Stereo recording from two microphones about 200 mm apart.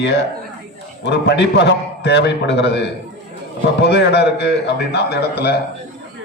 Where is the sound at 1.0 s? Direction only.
60° left (ahead or behind).